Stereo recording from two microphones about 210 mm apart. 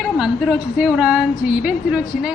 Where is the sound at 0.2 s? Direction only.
5° right (ahead or behind).